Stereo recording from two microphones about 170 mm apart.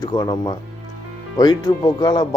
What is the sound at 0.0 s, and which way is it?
Speech, 25° left (ahead or behind).